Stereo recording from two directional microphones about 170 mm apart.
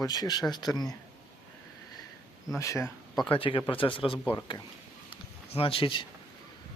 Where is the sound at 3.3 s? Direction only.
30° left (ahead or behind).